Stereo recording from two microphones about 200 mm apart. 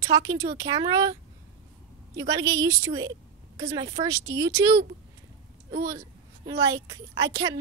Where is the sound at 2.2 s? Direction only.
15° right (ahead or behind).